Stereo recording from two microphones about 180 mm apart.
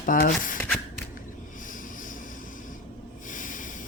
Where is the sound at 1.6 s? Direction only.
45° left (ahead or behind).